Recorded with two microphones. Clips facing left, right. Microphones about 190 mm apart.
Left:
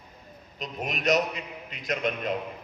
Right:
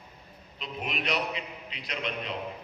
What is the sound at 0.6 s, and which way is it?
A man's voice, 40° left (ahead or behind).